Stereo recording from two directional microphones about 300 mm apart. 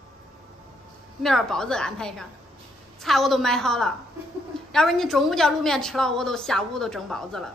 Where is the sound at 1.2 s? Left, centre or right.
Centre.